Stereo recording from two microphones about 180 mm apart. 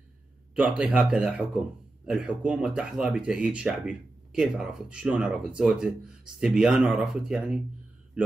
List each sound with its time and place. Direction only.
0.6 s speech: 10° right (ahead or behind)